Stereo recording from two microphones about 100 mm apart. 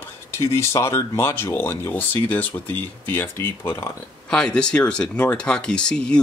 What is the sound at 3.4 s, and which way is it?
Speech, 30° left (ahead or behind).